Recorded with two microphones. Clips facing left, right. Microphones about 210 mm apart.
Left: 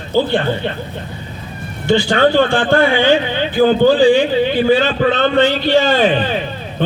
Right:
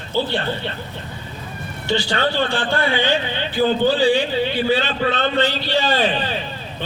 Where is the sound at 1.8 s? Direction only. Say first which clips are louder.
Left 8 dB; 50° left (ahead or behind).